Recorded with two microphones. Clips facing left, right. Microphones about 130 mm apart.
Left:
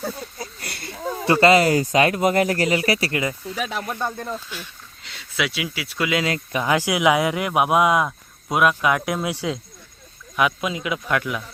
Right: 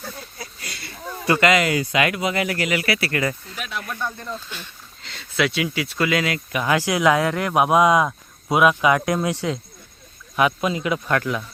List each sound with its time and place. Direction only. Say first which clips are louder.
0.6 s a sound: left 2 dB; 60° left (ahead or behind)
1.2 s speech: left 3 dB; 30° left (ahead or behind)
3.1 s speech: right 1 dB; 15° left (ahead or behind)
3.8 s speech: left 3 dB; 30° left (ahead or behind)
4.4 s speech: left 1 dB; 5° left (ahead or behind)
6.2 s speech: even; 30° left (ahead or behind); by 11.4 s 5° left (ahead or behind)